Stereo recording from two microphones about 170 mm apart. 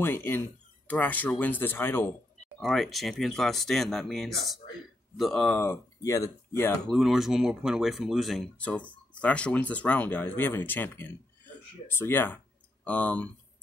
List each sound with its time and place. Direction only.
0.0 s speech: 15° left (ahead or behind)
2.6 s speech: centre (ahead or behind)
5.6 s speech: 15° left (ahead or behind)
6.9 s speech: centre (ahead or behind)